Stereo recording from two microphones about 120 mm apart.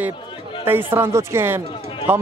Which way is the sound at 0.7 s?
20° right (ahead or behind).